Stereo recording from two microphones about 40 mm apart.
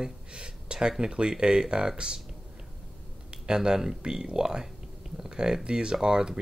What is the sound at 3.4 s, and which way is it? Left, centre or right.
Speech, centre.